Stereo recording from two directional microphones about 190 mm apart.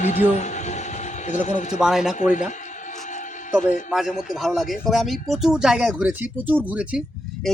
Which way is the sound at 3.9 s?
Centre (ahead or behind).